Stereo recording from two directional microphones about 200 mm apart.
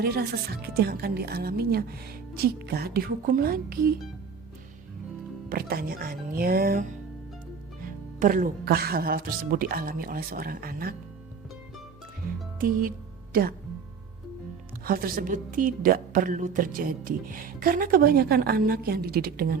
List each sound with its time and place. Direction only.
0.0 s a woman's voice: 50° right (ahead or behind)
5.5 s a woman's voice: 50° right (ahead or behind)
8.2 s a woman's voice: 45° right (ahead or behind)
12.5 s speech: 45° right (ahead or behind)
14.8 s a woman's voice: 45° right (ahead or behind)